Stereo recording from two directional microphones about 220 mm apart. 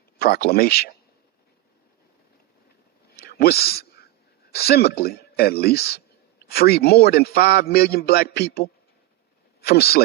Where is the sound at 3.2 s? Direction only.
45° left (ahead or behind).